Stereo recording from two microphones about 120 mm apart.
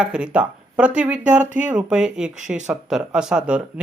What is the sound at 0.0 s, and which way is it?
Speech, 10° right (ahead or behind).